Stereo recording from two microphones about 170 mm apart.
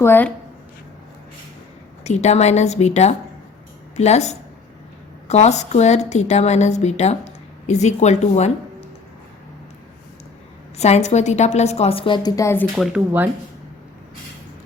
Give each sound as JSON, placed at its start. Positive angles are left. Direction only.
{"t": 0.0, "sound": "a woman's voice", "side_deg": 10}
{"t": 2.0, "sound": "a woman's voice", "side_deg": 40}
{"t": 10.8, "sound": "a woman's voice", "side_deg": 40}
{"t": 12.7, "sound": "speech", "side_deg": -5}